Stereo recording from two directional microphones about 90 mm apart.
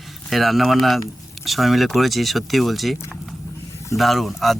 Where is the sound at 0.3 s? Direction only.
Centre (ahead or behind).